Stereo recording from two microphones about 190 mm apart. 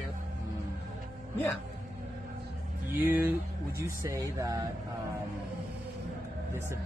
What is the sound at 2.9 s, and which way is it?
Speech, 10° right (ahead or behind).